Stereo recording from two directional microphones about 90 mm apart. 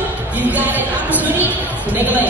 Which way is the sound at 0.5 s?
20° right (ahead or behind).